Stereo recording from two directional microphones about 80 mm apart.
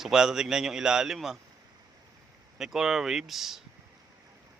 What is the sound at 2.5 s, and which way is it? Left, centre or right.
Speech, centre.